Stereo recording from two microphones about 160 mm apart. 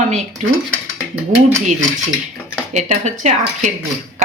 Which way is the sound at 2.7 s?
45° right (ahead or behind).